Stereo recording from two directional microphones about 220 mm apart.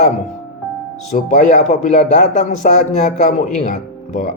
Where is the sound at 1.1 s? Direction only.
35° left (ahead or behind).